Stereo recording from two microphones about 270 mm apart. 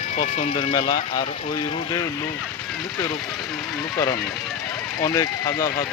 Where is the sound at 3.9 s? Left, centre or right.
Centre.